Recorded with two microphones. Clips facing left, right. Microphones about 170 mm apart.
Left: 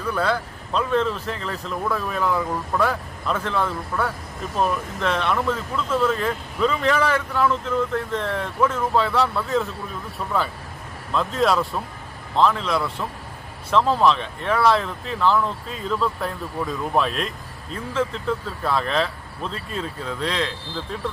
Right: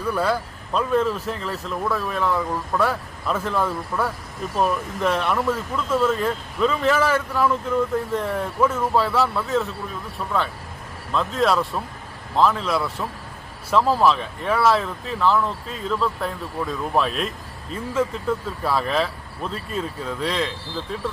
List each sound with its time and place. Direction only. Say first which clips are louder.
0.1 s speech: right 1 dB; 10° right (ahead or behind)
11.1 s speech: even; centre (ahead or behind)